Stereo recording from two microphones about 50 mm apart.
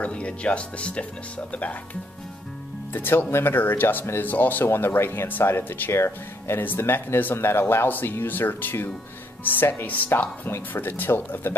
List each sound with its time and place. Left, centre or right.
0.0 s speech: left
2.9 s speech: left
3.5 s speech: left
5.9 s speech: left
6.6 s speech: left